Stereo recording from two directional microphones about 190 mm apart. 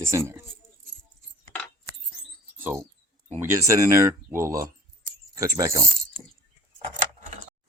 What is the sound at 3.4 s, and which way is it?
Speech, 15° right (ahead or behind).